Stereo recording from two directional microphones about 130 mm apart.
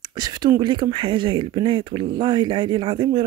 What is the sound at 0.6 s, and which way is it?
Speech, 35° right (ahead or behind).